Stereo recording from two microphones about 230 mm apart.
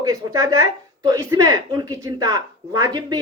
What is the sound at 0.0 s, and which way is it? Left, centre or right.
A woman's voice, centre.